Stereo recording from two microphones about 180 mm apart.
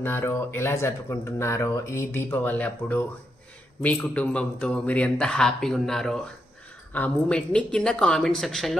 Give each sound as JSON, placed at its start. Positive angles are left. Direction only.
{"t": 0.0, "sound": "a man's voice", "side_deg": 15}